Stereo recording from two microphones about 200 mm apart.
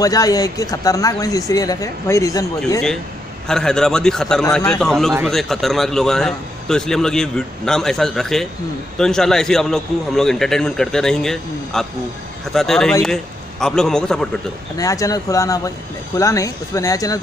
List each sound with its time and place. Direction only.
0.0 s speech: 20° left (ahead or behind)
3.4 s a man's voice: 5° left (ahead or behind)
14.8 s speech: 15° left (ahead or behind)